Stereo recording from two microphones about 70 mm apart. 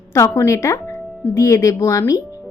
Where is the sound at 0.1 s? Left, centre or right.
Left.